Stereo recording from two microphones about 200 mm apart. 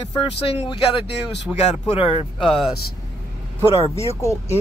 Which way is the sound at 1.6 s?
30° left (ahead or behind).